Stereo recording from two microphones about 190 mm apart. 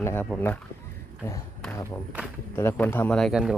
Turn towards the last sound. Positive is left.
turn(degrees=0)  # may be behind; listen again after turning